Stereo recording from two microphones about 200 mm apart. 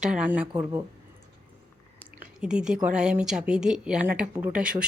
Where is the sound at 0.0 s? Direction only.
5° right (ahead or behind).